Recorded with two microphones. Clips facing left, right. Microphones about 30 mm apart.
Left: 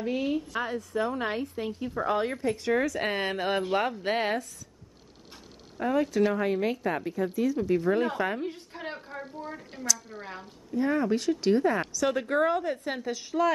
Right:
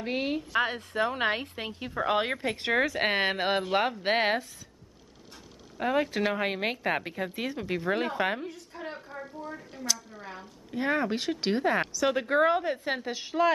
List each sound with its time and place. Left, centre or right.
0.0 s a woman's voice: right
5.8 s a woman's voice: right
7.8 s speech: right
8.5 s a sound: left
9.7 s speech: centre
10.7 s speech: right
11.8 s speech: centre